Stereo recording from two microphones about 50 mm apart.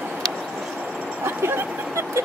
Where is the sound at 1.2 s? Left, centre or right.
Right.